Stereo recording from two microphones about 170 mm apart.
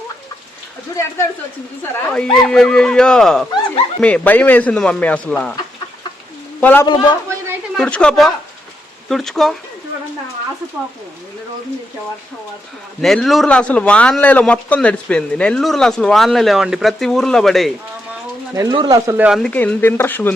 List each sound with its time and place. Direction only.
1.8 s a man's voice: 5° left (ahead or behind)
6.6 s a man's voice: 10° left (ahead or behind)
6.8 s a man's voice: 25° left (ahead or behind)
7.8 s speech: 5° left (ahead or behind)
13.0 s speech: centre (ahead or behind)
18.5 s speech: 25° right (ahead or behind)
19.2 s a man's voice: centre (ahead or behind)